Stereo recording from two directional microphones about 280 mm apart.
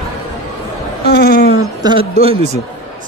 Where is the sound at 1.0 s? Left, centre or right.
Left.